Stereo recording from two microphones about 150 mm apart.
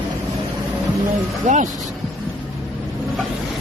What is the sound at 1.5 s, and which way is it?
Speech, 55° right (ahead or behind).